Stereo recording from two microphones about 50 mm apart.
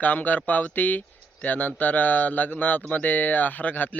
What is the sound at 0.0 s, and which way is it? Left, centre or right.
Speech, left.